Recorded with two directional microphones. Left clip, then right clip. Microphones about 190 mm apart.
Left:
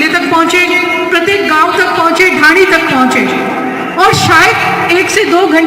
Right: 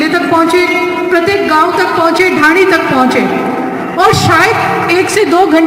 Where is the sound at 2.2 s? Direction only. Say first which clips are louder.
Left 3 dB; 60° right (ahead or behind).